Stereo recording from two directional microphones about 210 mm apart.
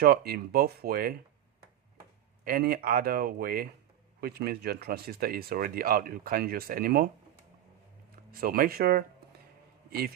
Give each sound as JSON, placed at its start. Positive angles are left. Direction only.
{"t": 0.0, "sound": "speech", "side_deg": -45}
{"t": 2.4, "sound": "speech", "side_deg": -45}
{"t": 8.3, "sound": "speech", "side_deg": -45}